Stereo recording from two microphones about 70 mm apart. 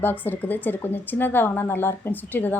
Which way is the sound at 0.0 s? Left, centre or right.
Left.